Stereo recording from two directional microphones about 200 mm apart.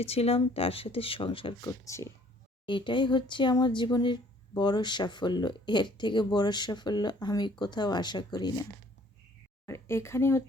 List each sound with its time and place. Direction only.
0.0 s speech: 30° left (ahead or behind)
9.6 s speech: 15° left (ahead or behind)